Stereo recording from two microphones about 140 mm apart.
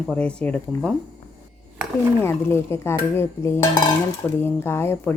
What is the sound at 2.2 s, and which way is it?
Speech, 15° left (ahead or behind).